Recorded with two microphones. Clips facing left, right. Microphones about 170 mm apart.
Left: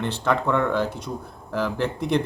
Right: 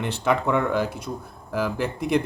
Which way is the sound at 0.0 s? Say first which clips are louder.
Even; 10° right (ahead or behind).